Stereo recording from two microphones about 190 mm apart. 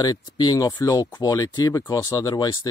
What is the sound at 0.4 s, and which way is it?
Speech, 20° left (ahead or behind).